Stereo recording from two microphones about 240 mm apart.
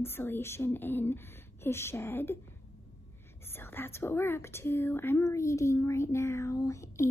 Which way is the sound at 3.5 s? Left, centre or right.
Centre.